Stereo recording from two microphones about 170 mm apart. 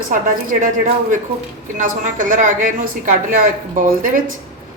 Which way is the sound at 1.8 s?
50° right (ahead or behind).